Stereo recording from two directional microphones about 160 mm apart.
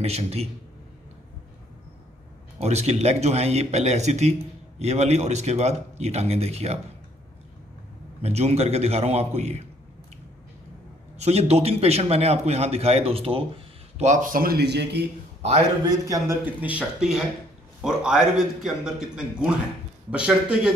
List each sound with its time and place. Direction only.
0.0 s a man's voice: 40° right (ahead or behind)
2.6 s speech: 40° right (ahead or behind)
8.2 s a man's voice: 40° right (ahead or behind)
11.1 s a man's voice: 40° right (ahead or behind)
13.9 s speech: 50° right (ahead or behind); by 15.0 s 90° right
15.9 s a man's voice: 20° right (ahead or behind)